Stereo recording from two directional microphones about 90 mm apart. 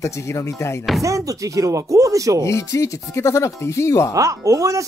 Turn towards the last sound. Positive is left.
turn(degrees=-40)  # may be behind; listen again after turning